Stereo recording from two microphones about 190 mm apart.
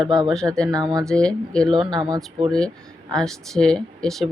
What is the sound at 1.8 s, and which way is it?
Speech, 25° right (ahead or behind).